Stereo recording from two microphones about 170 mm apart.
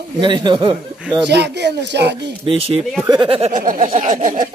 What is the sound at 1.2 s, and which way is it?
Speech, 85° right.